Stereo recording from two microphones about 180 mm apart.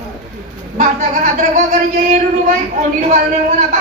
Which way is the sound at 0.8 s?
45° right (ahead or behind).